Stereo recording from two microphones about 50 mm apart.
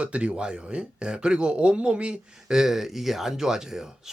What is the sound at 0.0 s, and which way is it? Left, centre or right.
Speech, right.